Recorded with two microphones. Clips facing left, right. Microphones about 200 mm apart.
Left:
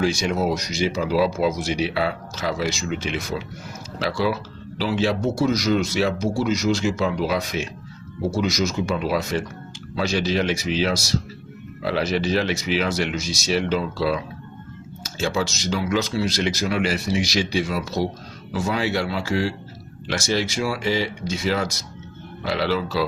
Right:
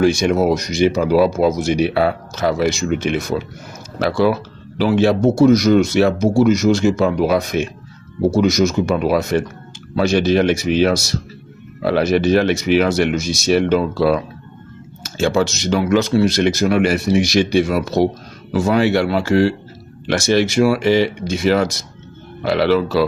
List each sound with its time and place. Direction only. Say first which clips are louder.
0.0 s speech: right 7 dB; 55° right (ahead or behind)
15.3 s speech: right 7 dB; 50° right (ahead or behind)